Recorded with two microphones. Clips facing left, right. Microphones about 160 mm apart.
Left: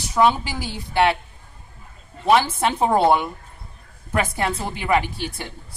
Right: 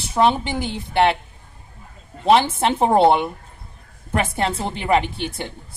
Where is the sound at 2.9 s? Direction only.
25° right (ahead or behind).